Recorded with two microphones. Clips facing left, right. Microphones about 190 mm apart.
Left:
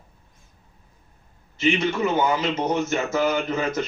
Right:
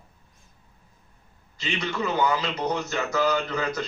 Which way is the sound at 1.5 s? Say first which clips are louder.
Left 8 dB; 20° left (ahead or behind).